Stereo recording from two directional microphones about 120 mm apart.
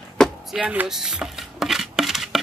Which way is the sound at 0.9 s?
5° right (ahead or behind).